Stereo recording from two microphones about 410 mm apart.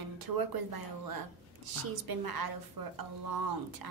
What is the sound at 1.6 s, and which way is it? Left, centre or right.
A woman's voice, right.